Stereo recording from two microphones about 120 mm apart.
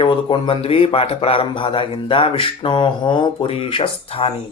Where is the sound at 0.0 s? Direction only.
45° left (ahead or behind).